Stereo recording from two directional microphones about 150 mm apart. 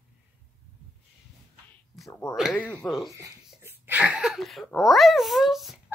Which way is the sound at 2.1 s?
20° left (ahead or behind).